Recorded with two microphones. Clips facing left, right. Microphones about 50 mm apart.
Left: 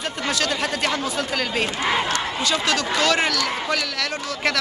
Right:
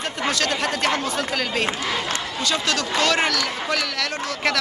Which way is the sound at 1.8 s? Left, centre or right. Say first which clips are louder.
Left 4 dB; left.